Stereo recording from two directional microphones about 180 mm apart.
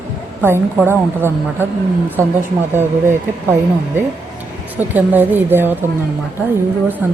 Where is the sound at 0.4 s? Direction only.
15° right (ahead or behind).